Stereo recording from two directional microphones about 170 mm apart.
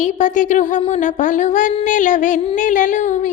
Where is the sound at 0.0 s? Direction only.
50° left (ahead or behind).